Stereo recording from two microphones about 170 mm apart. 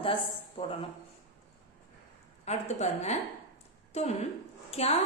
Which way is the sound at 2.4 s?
40° left (ahead or behind).